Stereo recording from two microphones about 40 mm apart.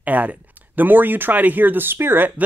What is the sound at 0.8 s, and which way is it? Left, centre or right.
Speech, right.